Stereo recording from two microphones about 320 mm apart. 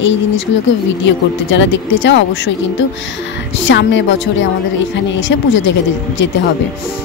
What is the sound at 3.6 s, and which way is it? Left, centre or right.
Speech, left.